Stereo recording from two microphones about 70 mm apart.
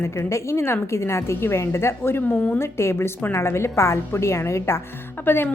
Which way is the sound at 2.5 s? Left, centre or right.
Left.